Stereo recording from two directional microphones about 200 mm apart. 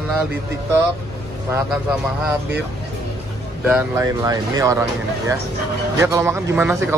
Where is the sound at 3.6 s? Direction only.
10° right (ahead or behind).